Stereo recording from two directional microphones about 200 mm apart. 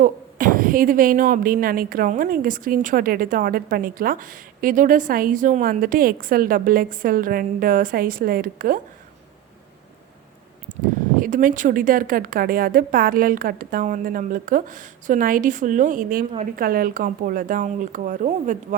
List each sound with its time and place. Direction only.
0.0 s speech: 45° right (ahead or behind)
10.7 s a sound: 40° right (ahead or behind)
11.2 s speech: 40° right (ahead or behind)